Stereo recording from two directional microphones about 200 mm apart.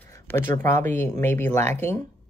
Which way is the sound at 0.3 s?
10° left (ahead or behind).